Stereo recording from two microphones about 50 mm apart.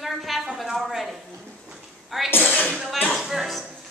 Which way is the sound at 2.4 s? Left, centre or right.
Left.